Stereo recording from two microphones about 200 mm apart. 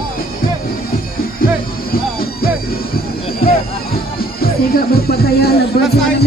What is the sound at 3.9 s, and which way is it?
Music, 50° left (ahead or behind).